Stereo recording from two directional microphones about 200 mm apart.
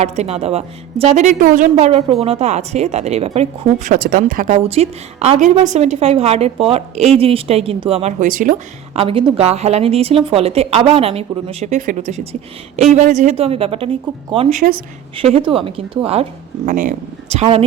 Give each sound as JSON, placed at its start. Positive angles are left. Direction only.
{"t": 0.0, "sound": "a woman's voice", "side_deg": -30}
{"t": 3.9, "sound": "a woman's voice", "side_deg": -45}
{"t": 16.6, "sound": "a woman's voice", "side_deg": -40}